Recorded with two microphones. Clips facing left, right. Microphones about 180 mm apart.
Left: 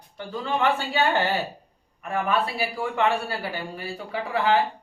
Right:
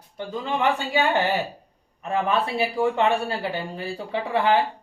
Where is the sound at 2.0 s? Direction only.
25° right (ahead or behind).